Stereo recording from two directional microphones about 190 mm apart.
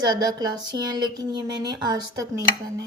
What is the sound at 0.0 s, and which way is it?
Speech, 20° right (ahead or behind).